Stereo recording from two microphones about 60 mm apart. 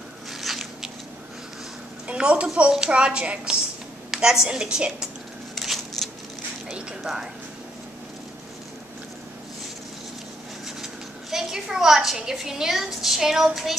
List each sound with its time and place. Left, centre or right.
0.3 s biting: centre
2.0 s a woman's voice: centre
5.5 s a sound: centre
10.8 s a woman's voice: centre